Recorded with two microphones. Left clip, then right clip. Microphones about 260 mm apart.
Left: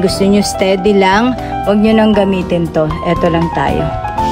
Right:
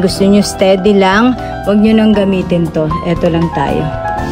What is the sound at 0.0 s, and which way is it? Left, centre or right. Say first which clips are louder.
Speech: right 1 dB; centre.